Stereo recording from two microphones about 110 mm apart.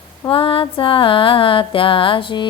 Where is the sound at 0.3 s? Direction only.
55° left (ahead or behind).